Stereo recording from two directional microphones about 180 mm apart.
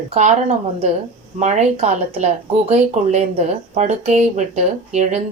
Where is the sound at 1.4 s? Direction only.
40° right (ahead or behind).